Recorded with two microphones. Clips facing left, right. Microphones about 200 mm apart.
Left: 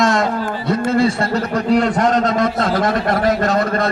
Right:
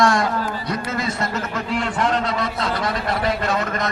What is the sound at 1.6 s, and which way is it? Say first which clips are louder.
A man's voice: left 8 dB; 40° left (ahead or behind).